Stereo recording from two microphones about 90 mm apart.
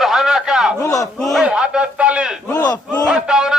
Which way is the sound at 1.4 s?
10° right (ahead or behind).